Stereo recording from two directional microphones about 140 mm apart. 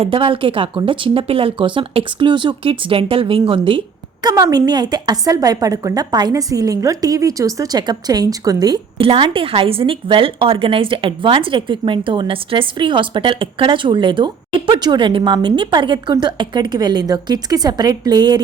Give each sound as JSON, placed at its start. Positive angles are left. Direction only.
{"t": 0.0, "sound": "a woman's voice", "side_deg": -40}